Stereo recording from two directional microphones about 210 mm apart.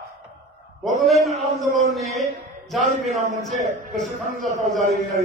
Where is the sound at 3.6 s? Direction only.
35° right (ahead or behind).